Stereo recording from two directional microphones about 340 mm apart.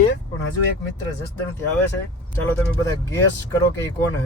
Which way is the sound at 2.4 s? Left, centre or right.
Centre.